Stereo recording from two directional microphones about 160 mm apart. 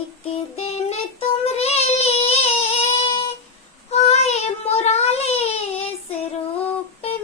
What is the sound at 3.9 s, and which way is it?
Child singing, 40° left (ahead or behind).